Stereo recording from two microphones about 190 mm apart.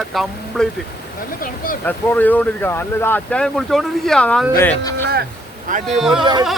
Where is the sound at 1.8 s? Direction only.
10° left (ahead or behind).